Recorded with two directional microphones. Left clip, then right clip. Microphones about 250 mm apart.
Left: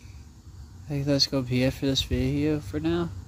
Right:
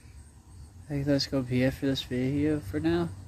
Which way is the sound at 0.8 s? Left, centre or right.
Centre.